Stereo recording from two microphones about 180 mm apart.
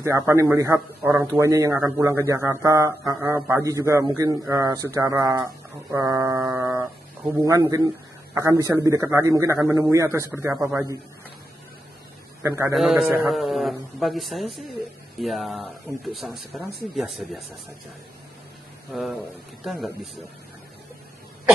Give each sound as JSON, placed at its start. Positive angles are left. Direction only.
{"t": 0.0, "sound": "a man's voice", "side_deg": -15}
{"t": 12.4, "sound": "a man's voice", "side_deg": -15}
{"t": 12.7, "sound": "speech", "side_deg": 0}
{"t": 18.9, "sound": "speech", "side_deg": 0}